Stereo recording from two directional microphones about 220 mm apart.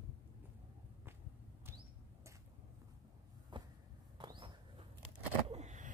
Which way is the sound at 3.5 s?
20° right (ahead or behind).